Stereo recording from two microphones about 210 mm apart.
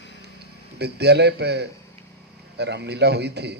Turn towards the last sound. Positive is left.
turn(degrees=-50)  # may be behind; listen again after turning